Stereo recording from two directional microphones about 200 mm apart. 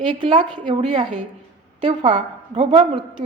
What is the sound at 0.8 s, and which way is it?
A woman's voice, 35° right (ahead or behind).